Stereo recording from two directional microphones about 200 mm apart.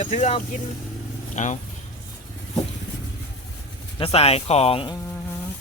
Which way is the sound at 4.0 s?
30° left (ahead or behind).